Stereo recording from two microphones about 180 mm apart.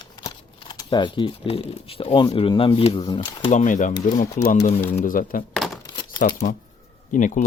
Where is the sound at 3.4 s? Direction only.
45° left (ahead or behind).